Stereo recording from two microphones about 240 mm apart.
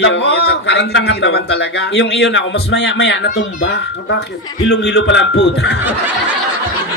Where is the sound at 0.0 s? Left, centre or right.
Left.